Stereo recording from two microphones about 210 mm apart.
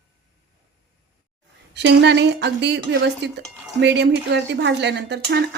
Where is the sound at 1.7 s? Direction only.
55° right (ahead or behind).